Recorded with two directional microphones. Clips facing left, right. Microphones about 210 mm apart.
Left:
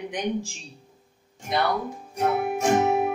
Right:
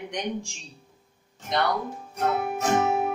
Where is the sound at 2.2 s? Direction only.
15° left (ahead or behind).